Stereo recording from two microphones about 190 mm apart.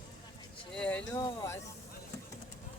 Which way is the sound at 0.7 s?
5° left (ahead or behind).